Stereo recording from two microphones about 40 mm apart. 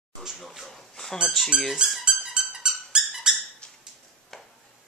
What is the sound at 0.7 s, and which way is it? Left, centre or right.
Speech, centre.